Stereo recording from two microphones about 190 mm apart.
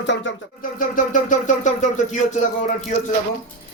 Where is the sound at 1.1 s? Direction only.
40° left (ahead or behind).